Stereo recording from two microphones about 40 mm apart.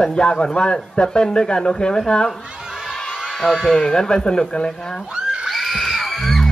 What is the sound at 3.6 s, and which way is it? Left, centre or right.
Speech, centre.